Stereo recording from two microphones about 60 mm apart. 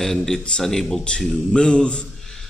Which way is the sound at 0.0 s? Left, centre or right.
Centre.